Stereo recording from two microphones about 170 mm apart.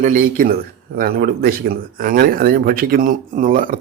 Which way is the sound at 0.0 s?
50° right (ahead or behind).